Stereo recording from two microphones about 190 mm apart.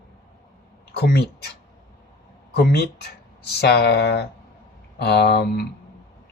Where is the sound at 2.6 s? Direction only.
60° left (ahead or behind).